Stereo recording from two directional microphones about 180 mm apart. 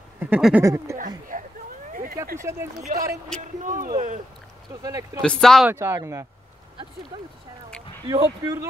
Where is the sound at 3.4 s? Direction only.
45° right (ahead or behind).